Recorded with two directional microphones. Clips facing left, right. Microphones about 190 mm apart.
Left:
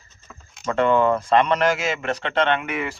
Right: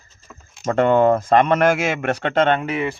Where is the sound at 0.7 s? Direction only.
45° right (ahead or behind).